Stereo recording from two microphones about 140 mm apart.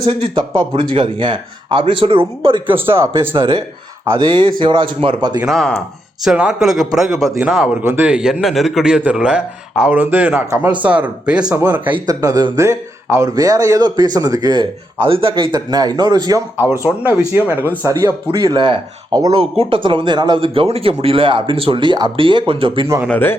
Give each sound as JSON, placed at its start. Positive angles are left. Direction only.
{"t": 0.0, "sound": "speech", "side_deg": -40}
{"t": 2.6, "sound": "a man's voice", "side_deg": -15}
{"t": 3.3, "sound": "speech", "side_deg": -40}
{"t": 4.6, "sound": "speech", "side_deg": -35}
{"t": 5.4, "sound": "a man's voice", "side_deg": 0}
{"t": 12.0, "sound": "a man's voice", "side_deg": -25}
{"t": 17.3, "sound": "a man's voice", "side_deg": -10}
{"t": 18.3, "sound": "speech", "side_deg": -30}
{"t": 23.0, "sound": "speech", "side_deg": 15}